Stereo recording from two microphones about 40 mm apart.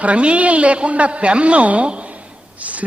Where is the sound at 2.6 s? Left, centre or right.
Right.